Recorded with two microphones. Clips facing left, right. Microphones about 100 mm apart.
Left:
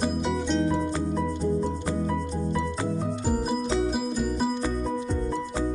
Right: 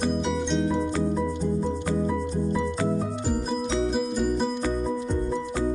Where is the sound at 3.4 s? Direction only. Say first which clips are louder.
Even; 5° left (ahead or behind).